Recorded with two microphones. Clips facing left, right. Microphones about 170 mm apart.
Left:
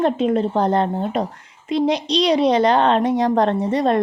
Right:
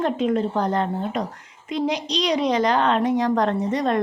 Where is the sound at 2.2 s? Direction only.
30° left (ahead or behind).